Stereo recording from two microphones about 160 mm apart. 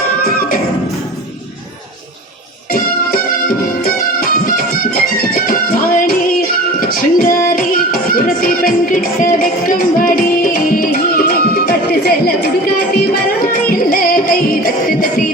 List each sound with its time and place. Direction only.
0.2 s music: 65° left (ahead or behind)
2.7 s music: 65° left (ahead or behind)
6.7 s child singing: 65° left (ahead or behind)